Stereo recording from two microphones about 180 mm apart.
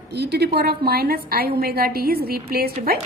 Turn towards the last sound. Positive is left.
turn(degrees=-55)  # may be behind; listen again after turning